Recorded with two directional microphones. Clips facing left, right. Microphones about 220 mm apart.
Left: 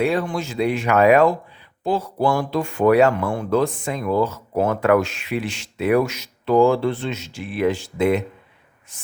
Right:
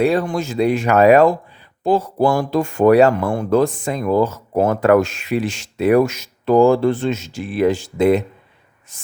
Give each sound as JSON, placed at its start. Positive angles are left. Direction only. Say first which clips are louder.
{"t": 0.0, "sound": "speech", "louder": "right 4 dB", "side_deg": -40}